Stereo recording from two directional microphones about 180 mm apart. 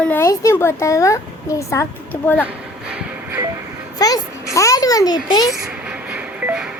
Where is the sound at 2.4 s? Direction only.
5° right (ahead or behind).